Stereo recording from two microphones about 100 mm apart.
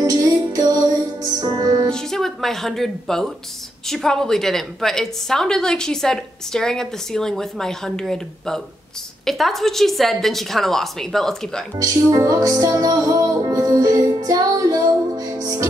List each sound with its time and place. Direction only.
0.0 s music: 35° right (ahead or behind)
1.9 s a woman's voice: 5° left (ahead or behind)
11.7 s music: 35° right (ahead or behind)